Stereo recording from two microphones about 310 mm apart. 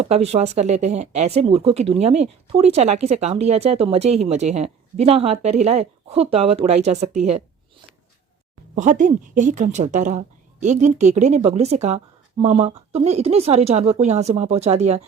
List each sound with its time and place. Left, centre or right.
0.0 s speech: centre
8.7 s speech: right